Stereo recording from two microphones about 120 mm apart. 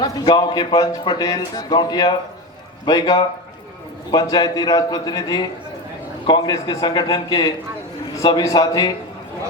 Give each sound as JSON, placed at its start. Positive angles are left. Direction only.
{"t": 0.0, "sound": "a man's voice", "side_deg": 35}